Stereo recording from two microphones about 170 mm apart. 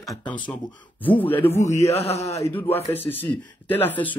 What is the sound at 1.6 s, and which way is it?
Speech, 40° left (ahead or behind).